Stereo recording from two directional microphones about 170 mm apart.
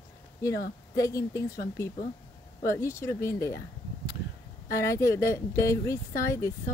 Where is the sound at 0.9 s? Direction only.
20° left (ahead or behind).